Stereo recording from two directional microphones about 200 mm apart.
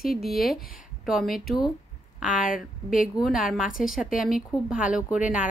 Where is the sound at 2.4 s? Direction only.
45° left (ahead or behind).